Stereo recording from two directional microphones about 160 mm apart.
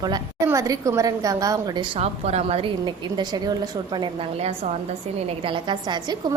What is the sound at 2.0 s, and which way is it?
A woman's voice, 40° right (ahead or behind).